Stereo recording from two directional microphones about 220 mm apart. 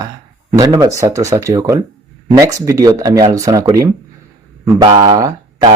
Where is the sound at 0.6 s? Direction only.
15° right (ahead or behind).